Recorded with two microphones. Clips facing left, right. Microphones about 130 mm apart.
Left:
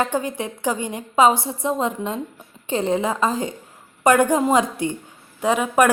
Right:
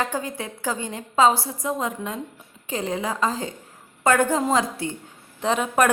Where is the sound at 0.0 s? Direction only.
20° left (ahead or behind).